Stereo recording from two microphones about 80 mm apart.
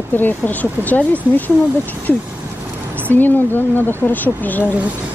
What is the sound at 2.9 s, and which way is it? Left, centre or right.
Speech, left.